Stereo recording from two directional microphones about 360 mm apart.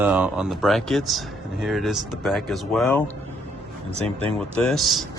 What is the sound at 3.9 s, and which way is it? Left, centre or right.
Speech, centre.